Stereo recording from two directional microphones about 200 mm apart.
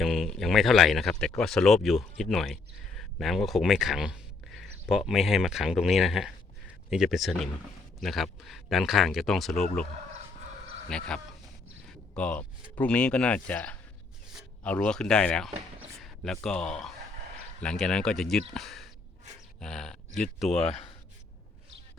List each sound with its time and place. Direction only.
0.0 s speech: centre (ahead or behind)
10.8 s speech: 5° left (ahead or behind)
20.5 s speech: 30° left (ahead or behind)